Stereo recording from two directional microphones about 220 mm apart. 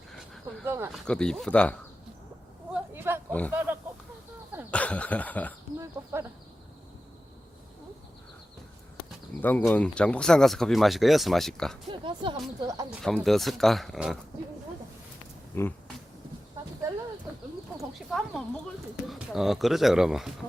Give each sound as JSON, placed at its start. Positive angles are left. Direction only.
{"t": 0.6, "sound": "speech", "side_deg": -10}
{"t": 1.0, "sound": "speech", "side_deg": 5}
{"t": 2.7, "sound": "a sound", "side_deg": -10}
{"t": 3.5, "sound": "speech", "side_deg": -10}
{"t": 4.7, "sound": "speech", "side_deg": 5}
{"t": 5.8, "sound": "speech", "side_deg": -15}
{"t": 9.4, "sound": "speech", "side_deg": 10}
{"t": 11.9, "sound": "speech", "side_deg": -20}
{"t": 13.0, "sound": "speech", "side_deg": 0}
{"t": 15.5, "sound": "speech", "side_deg": 10}
{"t": 18.1, "sound": "speech", "side_deg": 0}